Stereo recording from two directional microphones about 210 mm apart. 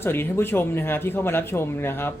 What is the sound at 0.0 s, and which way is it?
Speech, 10° left (ahead or behind).